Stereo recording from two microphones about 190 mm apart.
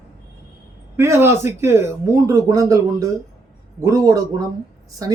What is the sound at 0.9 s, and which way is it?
Speech, 15° right (ahead or behind).